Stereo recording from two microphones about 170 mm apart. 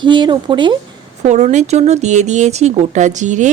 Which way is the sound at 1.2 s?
40° right (ahead or behind).